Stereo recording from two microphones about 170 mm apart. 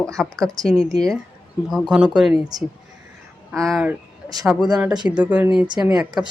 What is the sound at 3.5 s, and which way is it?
Speech, centre (ahead or behind).